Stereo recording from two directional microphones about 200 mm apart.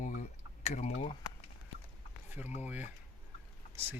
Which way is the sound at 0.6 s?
35° left (ahead or behind).